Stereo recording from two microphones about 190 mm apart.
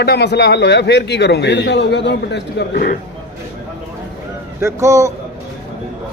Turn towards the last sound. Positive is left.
turn(degrees=-15)  # may be behind; listen again after turning